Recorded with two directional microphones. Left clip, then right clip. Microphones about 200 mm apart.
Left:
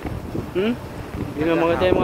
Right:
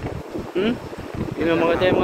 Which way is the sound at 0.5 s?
5° right (ahead or behind).